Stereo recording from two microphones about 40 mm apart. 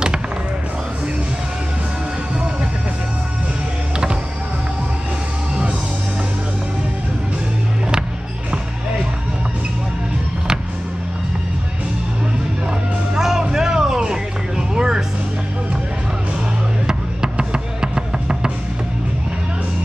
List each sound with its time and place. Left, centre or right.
13.1 s music: centre
16.8 s music: centre